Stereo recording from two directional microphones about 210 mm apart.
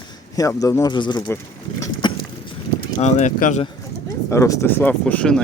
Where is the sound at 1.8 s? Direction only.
20° left (ahead or behind).